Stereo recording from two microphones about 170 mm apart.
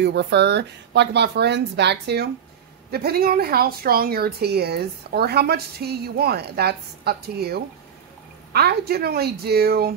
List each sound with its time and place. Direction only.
0.0 s speech: 90° right
2.9 s speech: 65° right (ahead or behind)